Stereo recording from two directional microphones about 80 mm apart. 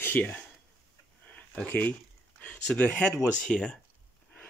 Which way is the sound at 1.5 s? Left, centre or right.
Centre.